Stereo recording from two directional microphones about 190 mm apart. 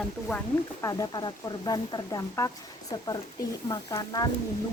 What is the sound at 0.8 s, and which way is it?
Speech, 20° left (ahead or behind).